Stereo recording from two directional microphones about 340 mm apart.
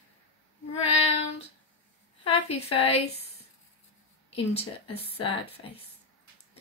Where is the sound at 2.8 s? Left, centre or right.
Centre.